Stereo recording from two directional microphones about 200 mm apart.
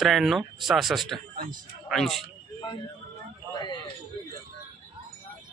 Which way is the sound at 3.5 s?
20° left (ahead or behind).